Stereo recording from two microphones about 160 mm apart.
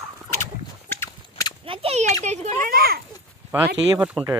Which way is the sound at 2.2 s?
45° right (ahead or behind).